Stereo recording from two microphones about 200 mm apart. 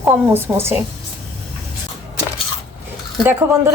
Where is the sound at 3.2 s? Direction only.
10° right (ahead or behind).